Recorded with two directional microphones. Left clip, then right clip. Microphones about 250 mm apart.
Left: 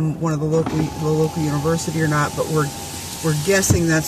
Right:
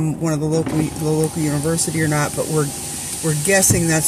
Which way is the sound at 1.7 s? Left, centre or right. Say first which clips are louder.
Left 2 dB; right.